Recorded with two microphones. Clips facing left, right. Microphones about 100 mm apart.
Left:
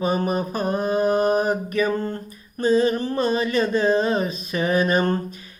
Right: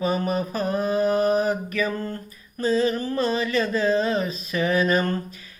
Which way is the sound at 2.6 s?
25° left (ahead or behind).